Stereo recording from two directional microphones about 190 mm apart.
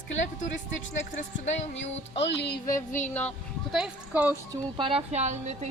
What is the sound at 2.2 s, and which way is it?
Music, 65° left (ahead or behind).